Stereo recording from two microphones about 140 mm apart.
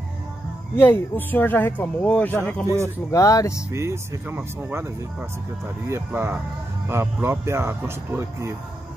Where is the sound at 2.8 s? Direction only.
20° left (ahead or behind).